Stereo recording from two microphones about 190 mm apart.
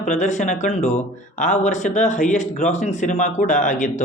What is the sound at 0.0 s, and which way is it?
A man's voice, 40° left (ahead or behind).